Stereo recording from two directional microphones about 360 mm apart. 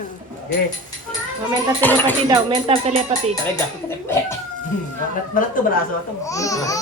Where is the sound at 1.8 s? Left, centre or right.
Centre.